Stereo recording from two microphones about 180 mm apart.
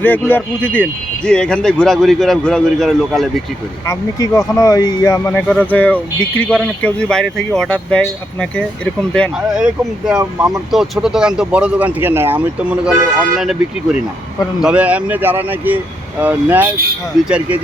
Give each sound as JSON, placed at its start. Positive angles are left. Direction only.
{"t": 0.0, "sound": "speech", "side_deg": 10}
{"t": 3.8, "sound": "speech", "side_deg": 15}
{"t": 10.2, "sound": "speech", "side_deg": -15}
{"t": 10.7, "sound": "speech", "side_deg": 0}